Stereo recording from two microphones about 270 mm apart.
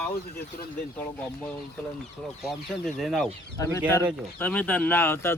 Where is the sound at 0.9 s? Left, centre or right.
Centre.